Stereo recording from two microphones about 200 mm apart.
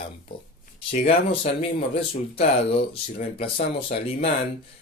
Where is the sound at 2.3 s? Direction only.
30° left (ahead or behind).